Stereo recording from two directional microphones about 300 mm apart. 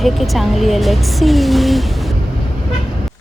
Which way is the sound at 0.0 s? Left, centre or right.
Centre.